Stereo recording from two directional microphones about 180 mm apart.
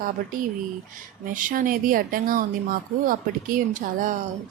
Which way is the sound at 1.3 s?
45° right (ahead or behind).